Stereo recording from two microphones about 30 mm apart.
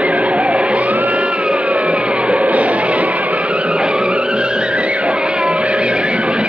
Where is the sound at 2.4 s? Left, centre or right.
Right.